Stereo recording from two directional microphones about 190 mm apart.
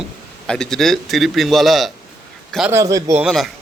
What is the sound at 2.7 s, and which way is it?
Speech, 20° right (ahead or behind).